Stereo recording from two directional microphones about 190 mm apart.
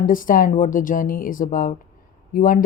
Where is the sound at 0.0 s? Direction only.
45° left (ahead or behind).